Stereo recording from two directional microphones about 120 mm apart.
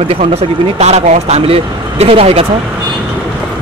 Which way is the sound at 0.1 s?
55° right (ahead or behind).